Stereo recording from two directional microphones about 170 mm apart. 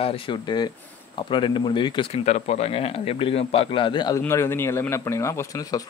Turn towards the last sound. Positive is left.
turn(degrees=20)  # may be behind; listen again after turning